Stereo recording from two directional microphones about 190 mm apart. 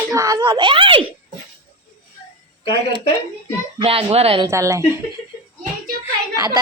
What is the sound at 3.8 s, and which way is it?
Speech, 30° right (ahead or behind).